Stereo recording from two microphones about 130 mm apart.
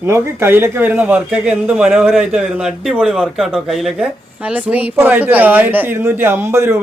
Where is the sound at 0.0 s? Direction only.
20° right (ahead or behind).